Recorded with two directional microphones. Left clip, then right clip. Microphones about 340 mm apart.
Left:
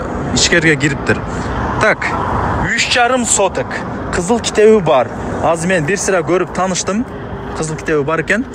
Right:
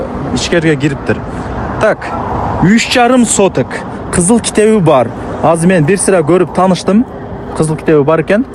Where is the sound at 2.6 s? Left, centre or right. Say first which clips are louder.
Right 4 dB; centre.